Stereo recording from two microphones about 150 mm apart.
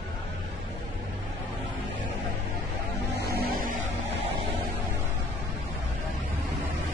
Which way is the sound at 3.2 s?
90° right.